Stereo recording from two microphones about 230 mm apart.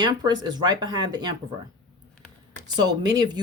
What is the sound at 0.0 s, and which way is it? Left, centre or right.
Speech, centre.